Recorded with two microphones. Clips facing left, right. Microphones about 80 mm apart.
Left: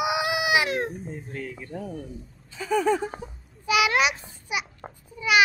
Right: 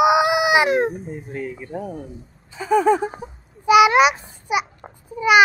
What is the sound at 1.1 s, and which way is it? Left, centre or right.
Speech, centre.